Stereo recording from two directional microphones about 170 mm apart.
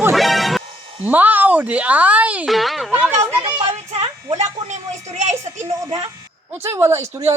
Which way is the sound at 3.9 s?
40° right (ahead or behind).